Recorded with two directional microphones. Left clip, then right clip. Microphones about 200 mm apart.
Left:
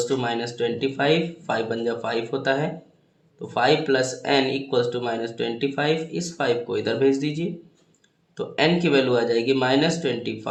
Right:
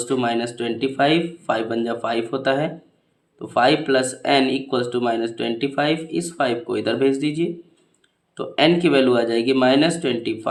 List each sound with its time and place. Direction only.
0.0 s speech: 35° right (ahead or behind)